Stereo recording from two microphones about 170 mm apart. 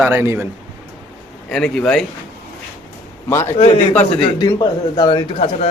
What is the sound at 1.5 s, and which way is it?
Speech, 5° left (ahead or behind).